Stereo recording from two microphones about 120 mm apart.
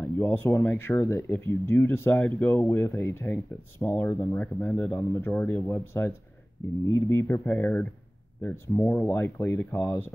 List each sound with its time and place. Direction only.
0.0 s speech: 20° left (ahead or behind)